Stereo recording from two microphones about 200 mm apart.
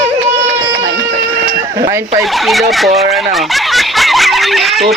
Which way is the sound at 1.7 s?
15° right (ahead or behind).